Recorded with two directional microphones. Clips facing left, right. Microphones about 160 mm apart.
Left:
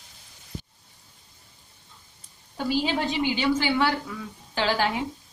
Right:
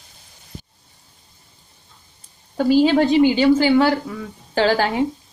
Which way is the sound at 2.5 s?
45° right (ahead or behind).